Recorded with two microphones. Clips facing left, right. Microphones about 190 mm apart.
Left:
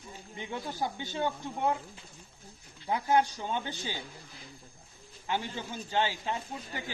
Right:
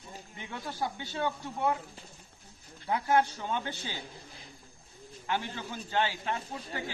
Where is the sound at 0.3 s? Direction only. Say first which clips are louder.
Left 2 dB; 20° left (ahead or behind).